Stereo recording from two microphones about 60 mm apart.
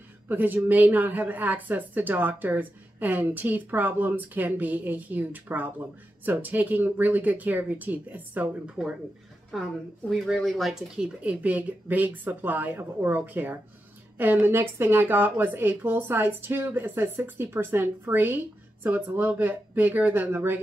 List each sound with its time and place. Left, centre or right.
0.3 s a woman's voice: right
9.5 s speech: centre
11.1 s a woman's voice: right